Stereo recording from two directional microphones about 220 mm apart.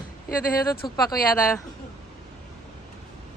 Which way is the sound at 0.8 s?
20° left (ahead or behind).